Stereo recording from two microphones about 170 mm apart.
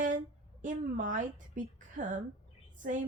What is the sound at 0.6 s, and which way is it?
Speech, 50° right (ahead or behind).